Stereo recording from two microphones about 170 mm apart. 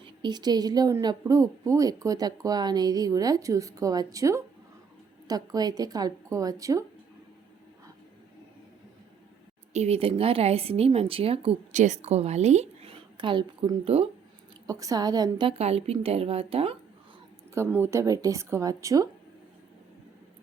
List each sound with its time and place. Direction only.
0.0 s speech: 25° right (ahead or behind)
9.7 s speech: 40° right (ahead or behind)
14.7 s speech: 20° right (ahead or behind)
17.5 s speech: 15° right (ahead or behind)